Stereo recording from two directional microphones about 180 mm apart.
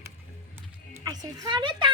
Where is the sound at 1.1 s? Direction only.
25° right (ahead or behind).